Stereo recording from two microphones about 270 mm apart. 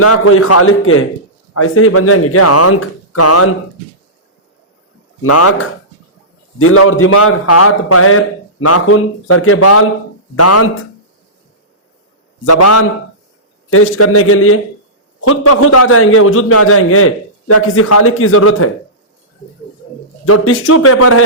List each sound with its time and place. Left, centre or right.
0.0 s a man's voice: left
5.2 s a man's voice: left
12.5 s speech: left
13.7 s speech: left
20.2 s speech: left